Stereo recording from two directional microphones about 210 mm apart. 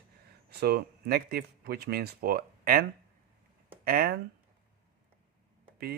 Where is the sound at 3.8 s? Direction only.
45° right (ahead or behind).